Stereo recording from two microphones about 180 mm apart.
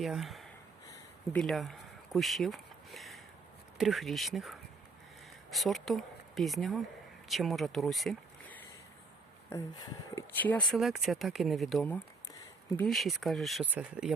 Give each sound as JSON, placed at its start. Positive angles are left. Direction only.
{"t": 0.0, "sound": "speech", "side_deg": 0}
{"t": 9.5, "sound": "speech", "side_deg": 15}
{"t": 10.8, "sound": "speech", "side_deg": 0}